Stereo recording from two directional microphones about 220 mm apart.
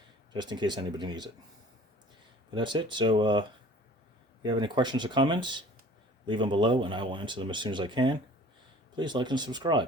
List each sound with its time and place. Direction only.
0.3 s speech: 20° right (ahead or behind)
2.6 s speech: 20° right (ahead or behind)
4.4 s speech: 20° right (ahead or behind)